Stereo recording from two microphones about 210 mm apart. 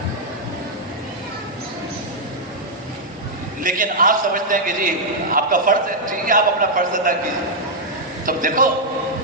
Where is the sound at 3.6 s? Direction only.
40° right (ahead or behind).